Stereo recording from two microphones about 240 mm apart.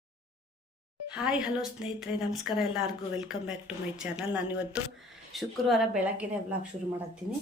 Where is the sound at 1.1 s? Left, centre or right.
Centre.